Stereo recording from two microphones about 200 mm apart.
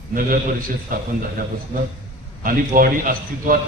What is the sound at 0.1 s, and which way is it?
Speech, 45° right (ahead or behind).